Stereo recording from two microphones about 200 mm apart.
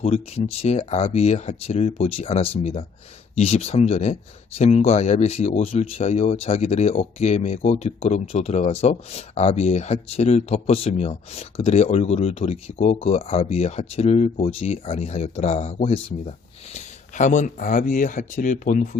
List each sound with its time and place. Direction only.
0.0 s speech: 30° left (ahead or behind)